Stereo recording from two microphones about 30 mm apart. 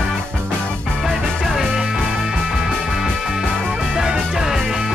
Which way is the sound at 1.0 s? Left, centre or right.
Centre.